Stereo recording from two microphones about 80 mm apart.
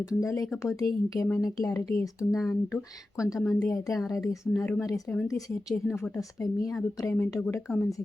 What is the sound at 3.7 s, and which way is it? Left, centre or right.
Speech, left.